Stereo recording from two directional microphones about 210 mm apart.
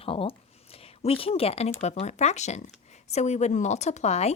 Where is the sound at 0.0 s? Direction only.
25° left (ahead or behind).